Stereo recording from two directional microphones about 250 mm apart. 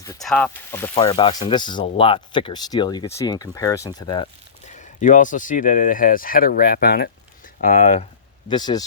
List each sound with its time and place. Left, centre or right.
0.2 s speech: centre; by 8.0 s left
8.4 s speech: centre